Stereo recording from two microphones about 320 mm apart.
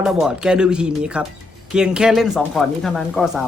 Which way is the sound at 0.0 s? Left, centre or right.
Centre.